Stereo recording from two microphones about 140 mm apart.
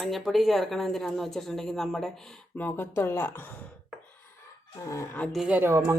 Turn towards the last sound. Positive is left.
turn(degrees=-20)  # may be behind; listen again after turning